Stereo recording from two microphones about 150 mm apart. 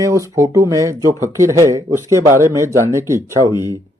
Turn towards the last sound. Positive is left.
turn(degrees=-20)  # may be behind; listen again after turning